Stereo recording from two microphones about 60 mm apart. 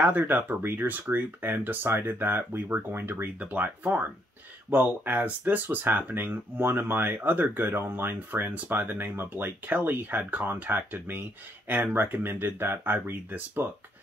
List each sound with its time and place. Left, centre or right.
0.0 s speech: right
3.3 s speech: right